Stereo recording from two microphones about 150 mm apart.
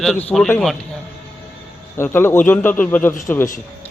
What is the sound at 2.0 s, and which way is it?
Speech, 15° left (ahead or behind).